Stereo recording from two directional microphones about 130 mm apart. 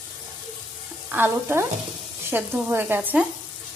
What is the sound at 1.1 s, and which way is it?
Speech, 15° right (ahead or behind).